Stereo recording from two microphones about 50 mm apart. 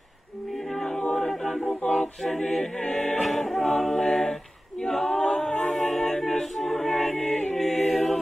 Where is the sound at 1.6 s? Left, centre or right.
Left.